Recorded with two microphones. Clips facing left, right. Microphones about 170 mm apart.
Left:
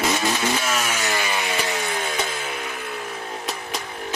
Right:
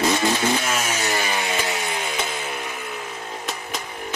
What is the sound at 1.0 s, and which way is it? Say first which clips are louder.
Chainsaw: right 1 dB; 25° right (ahead or behind).